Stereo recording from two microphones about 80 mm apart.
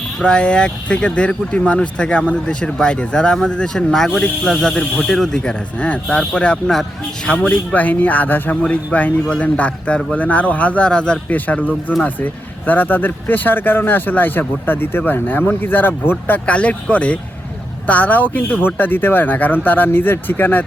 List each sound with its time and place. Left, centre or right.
0.2 s speech: centre